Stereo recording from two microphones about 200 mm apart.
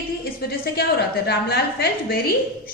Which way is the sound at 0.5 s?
50° left (ahead or behind).